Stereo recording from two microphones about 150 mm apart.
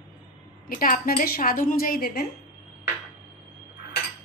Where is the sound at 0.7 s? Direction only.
65° left (ahead or behind); by 2.3 s 90° left.